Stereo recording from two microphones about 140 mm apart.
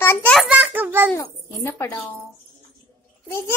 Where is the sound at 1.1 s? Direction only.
20° left (ahead or behind).